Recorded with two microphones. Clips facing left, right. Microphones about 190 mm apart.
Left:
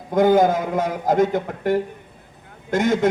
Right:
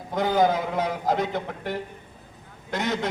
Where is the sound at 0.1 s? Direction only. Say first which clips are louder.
Left 6 dB; 50° left (ahead or behind).